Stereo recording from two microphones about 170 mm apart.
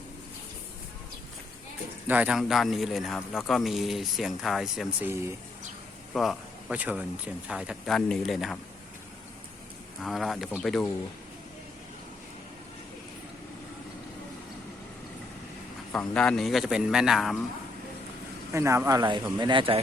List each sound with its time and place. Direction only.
2.0 s speech: 10° right (ahead or behind)
6.1 s speech: 5° right (ahead or behind)
10.0 s speech: centre (ahead or behind)
15.9 s speech: 5° left (ahead or behind)
18.5 s speech: 15° right (ahead or behind)